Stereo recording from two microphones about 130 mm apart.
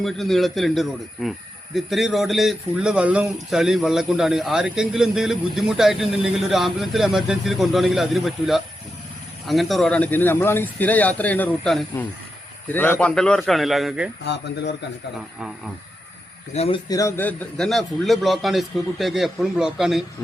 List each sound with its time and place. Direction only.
0.0 s speech: centre (ahead or behind)
12.6 s speech: 15° left (ahead or behind); by 14.1 s 5° right (ahead or behind)
15.4 s speech: 5° right (ahead or behind)
16.5 s speech: 50° left (ahead or behind)
16.9 s speech: 25° left (ahead or behind)
17.6 s speech: centre (ahead or behind)